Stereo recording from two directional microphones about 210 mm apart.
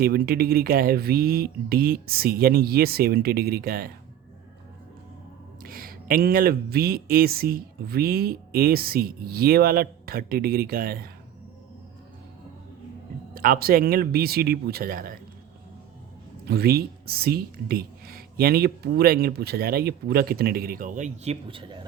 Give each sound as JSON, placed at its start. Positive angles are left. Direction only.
{"t": 0.0, "sound": "speech", "side_deg": -45}
{"t": 5.6, "sound": "speech", "side_deg": -45}
{"t": 13.3, "sound": "speech", "side_deg": -45}
{"t": 16.5, "sound": "speech", "side_deg": -50}
{"t": 21.4, "sound": "speech", "side_deg": -25}